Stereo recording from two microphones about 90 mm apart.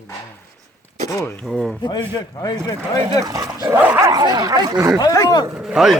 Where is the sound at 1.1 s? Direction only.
30° left (ahead or behind).